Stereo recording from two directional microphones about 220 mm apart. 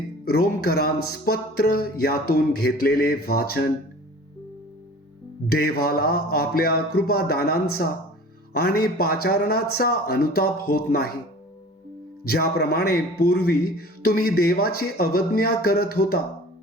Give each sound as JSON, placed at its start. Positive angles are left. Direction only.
{"t": 0.3, "sound": "a man's voice", "side_deg": 45}
{"t": 5.5, "sound": "a man's voice", "side_deg": 45}
{"t": 12.2, "sound": "a man's voice", "side_deg": 45}